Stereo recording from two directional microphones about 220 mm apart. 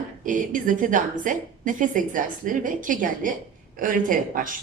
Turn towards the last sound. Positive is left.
turn(degrees=-35)  # may be behind; listen again after turning